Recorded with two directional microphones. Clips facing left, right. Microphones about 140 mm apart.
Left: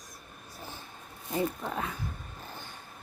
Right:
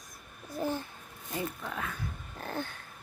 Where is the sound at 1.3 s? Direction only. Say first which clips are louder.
Left 5 dB; 35° left (ahead or behind).